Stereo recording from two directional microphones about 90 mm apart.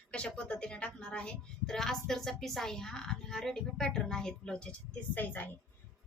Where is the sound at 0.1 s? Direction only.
10° left (ahead or behind).